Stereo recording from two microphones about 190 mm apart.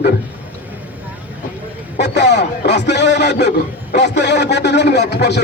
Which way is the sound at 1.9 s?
65° left (ahead or behind).